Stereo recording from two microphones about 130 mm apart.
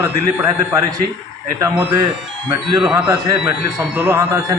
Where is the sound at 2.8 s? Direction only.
5° right (ahead or behind).